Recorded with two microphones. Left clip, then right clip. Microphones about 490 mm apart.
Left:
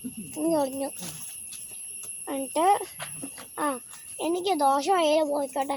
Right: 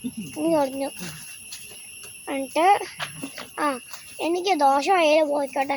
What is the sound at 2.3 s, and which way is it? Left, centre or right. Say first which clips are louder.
Speech: right 4 dB; left.